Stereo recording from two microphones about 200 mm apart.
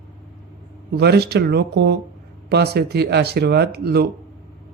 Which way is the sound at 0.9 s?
55° right (ahead or behind).